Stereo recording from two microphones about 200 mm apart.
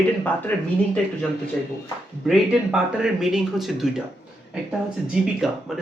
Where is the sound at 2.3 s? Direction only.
Centre (ahead or behind).